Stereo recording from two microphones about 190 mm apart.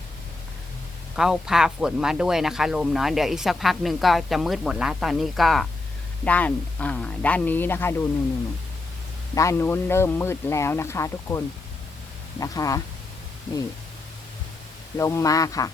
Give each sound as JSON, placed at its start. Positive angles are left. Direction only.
{"t": 1.1, "sound": "speech", "side_deg": 0}
{"t": 9.3, "sound": "speech", "side_deg": 15}
{"t": 14.9, "sound": "speech", "side_deg": 15}